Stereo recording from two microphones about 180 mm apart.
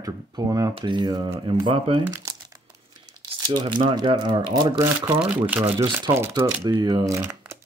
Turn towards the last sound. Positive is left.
turn(degrees=-15)  # may be behind; listen again after turning